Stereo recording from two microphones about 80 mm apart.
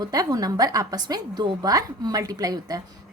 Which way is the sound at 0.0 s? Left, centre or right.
Right.